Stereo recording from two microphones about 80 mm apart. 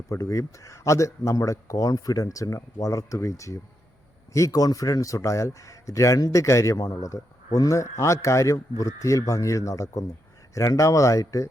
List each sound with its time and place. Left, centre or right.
0.1 s a man's voice: left